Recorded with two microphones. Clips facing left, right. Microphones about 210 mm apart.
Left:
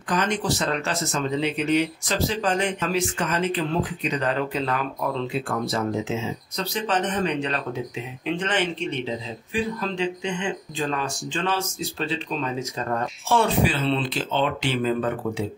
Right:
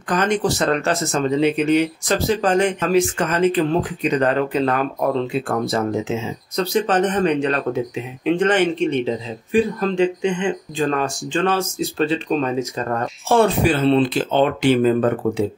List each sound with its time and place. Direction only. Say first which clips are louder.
0.1 s speech: right 5 dB; 50° right (ahead or behind)